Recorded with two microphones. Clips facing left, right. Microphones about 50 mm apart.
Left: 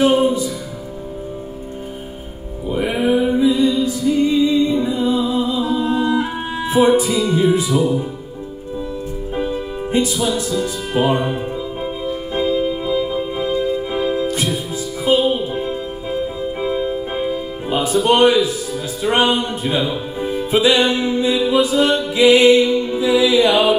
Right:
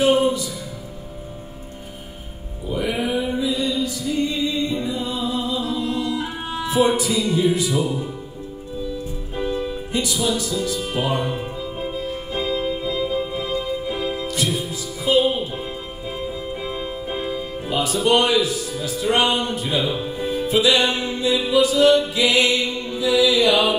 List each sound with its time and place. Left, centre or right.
0.0 s music: left
2.7 s music: left
9.4 s music: left
12.4 s organ: centre
13.3 s music: left
16.6 s music: centre
17.1 s music: centre
17.6 s speech: left
20.2 s music: left